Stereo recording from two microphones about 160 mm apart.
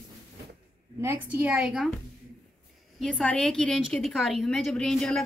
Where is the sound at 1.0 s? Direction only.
15° right (ahead or behind).